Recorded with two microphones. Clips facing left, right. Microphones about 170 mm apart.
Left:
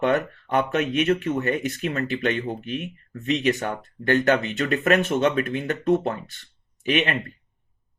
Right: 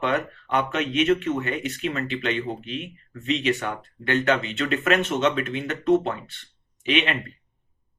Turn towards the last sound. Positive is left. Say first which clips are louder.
# left 1 dB
turn(degrees=40)  # may be behind; listen again after turning